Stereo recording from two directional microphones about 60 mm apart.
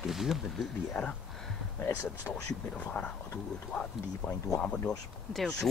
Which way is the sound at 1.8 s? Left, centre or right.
Left.